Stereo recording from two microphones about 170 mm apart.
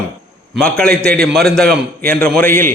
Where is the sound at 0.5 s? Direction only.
5° left (ahead or behind).